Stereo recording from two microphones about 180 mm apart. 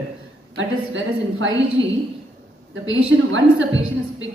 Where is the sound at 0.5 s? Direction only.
90° right.